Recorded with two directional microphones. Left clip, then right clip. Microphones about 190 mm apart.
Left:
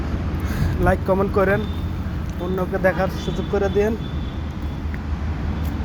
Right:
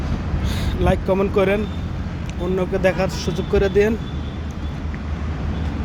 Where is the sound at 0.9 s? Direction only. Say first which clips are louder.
Even; 5° right (ahead or behind).